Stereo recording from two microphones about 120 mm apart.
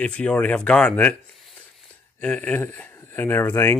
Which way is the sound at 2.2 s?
10° left (ahead or behind).